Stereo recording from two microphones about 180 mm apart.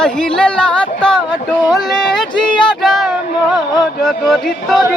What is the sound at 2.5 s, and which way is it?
Speech, 25° left (ahead or behind).